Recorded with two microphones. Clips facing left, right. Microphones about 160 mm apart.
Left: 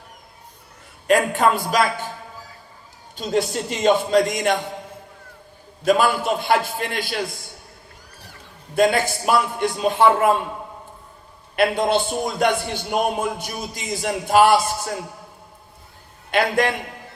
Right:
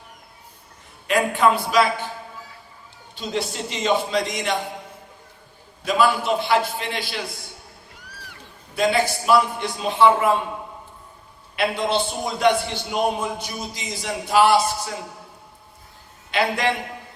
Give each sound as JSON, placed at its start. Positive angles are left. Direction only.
{"t": 1.0, "sound": "a man's voice", "side_deg": 45}
{"t": 3.2, "sound": "a man's voice", "side_deg": 45}
{"t": 5.8, "sound": "a man's voice", "side_deg": 50}
{"t": 8.7, "sound": "a man's voice", "side_deg": 50}
{"t": 11.5, "sound": "a man's voice", "side_deg": 50}
{"t": 16.3, "sound": "a man's voice", "side_deg": 50}